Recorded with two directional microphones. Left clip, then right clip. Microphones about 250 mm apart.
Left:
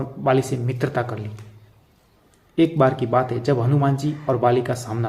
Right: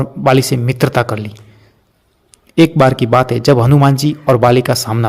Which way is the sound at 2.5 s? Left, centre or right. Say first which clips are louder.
Right 8 dB; right.